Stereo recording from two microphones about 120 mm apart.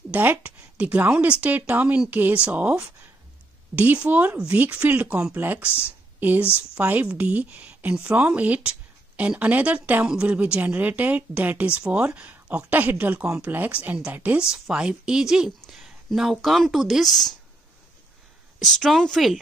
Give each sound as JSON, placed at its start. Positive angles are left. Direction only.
{"t": 0.1, "sound": "speech", "side_deg": -15}
{"t": 5.9, "sound": "a sound", "side_deg": -15}
{"t": 6.7, "sound": "speech", "side_deg": -15}
{"t": 18.6, "sound": "speech", "side_deg": 0}